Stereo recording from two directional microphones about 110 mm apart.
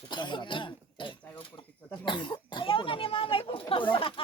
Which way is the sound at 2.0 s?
45° left (ahead or behind).